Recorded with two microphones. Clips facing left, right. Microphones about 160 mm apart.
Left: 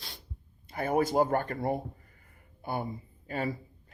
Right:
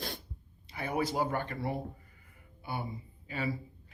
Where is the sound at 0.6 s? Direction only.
50° left (ahead or behind).